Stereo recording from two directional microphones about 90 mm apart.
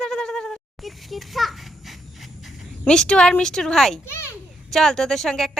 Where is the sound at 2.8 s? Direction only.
10° left (ahead or behind).